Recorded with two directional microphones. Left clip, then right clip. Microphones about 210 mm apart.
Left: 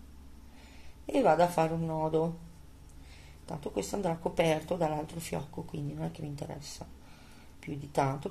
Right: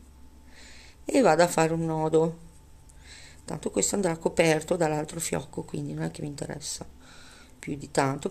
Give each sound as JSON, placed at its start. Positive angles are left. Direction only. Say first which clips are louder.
{"t": 0.7, "sound": "speech", "louder": "right 6 dB", "side_deg": -35}
{"t": 3.4, "sound": "speech", "louder": "right 7 dB", "side_deg": -35}